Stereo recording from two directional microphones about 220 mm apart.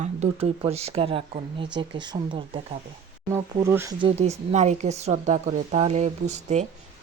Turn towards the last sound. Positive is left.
turn(degrees=-30)  # may be behind; listen again after turning